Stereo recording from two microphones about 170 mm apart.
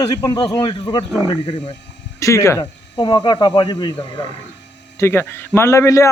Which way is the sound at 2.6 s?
25° left (ahead or behind).